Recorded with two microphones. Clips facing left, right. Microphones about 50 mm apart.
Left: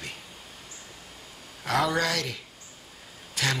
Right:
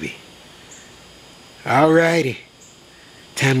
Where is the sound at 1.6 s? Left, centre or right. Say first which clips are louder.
Right 12 dB; right.